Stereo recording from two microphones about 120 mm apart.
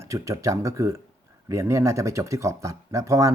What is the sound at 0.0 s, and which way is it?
Speech, 25° right (ahead or behind).